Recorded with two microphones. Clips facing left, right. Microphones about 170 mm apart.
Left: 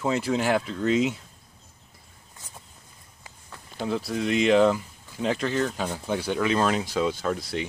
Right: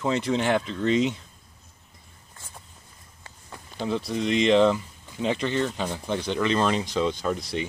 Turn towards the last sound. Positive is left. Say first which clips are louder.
# even
turn(degrees=0)  # may be behind; listen again after turning